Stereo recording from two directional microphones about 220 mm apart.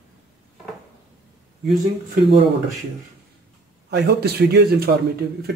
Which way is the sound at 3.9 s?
50° right (ahead or behind).